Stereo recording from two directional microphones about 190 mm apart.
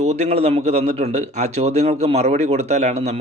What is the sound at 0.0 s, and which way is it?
A man's voice, 35° right (ahead or behind).